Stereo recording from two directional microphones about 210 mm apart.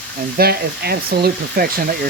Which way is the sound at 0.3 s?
50° right (ahead or behind).